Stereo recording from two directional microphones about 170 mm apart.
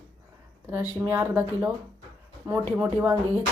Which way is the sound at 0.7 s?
10° right (ahead or behind).